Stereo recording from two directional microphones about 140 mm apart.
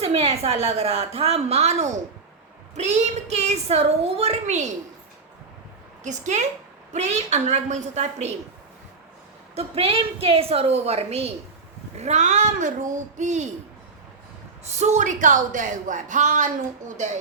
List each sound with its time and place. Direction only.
0.0 s a woman's voice: 45° right (ahead or behind)
6.0 s a woman's voice: 60° right (ahead or behind)
9.6 s a woman's voice: 45° right (ahead or behind)
14.6 s a woman's voice: 55° right (ahead or behind)